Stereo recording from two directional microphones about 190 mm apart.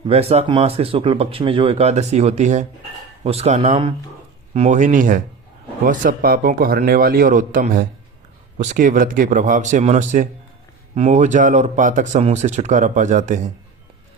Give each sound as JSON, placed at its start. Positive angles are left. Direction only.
{"t": 0.1, "sound": "a man's voice", "side_deg": -30}